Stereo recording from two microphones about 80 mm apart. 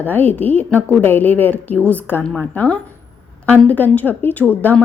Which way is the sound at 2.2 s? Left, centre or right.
Centre.